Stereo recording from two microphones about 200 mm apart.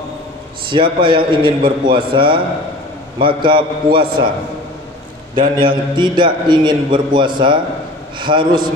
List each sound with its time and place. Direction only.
0.7 s a man's voice: 25° right (ahead or behind)
5.6 s a man's voice: 25° right (ahead or behind)